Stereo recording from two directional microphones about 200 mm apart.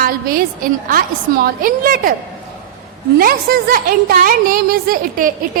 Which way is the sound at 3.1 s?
45° right (ahead or behind).